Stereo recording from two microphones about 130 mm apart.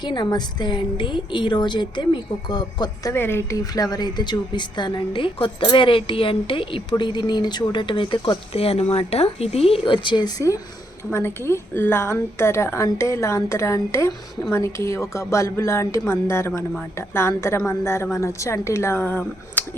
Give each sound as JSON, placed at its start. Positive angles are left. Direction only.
{"t": 0.0, "sound": "speech", "side_deg": 35}
{"t": 3.1, "sound": "a woman's voice", "side_deg": 20}